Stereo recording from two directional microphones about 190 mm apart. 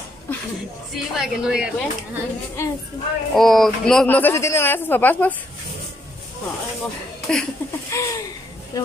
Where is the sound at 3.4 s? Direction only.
Centre (ahead or behind).